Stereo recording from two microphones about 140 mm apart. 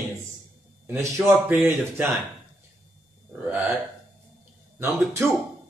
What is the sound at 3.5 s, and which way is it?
Burping, 5° right (ahead or behind).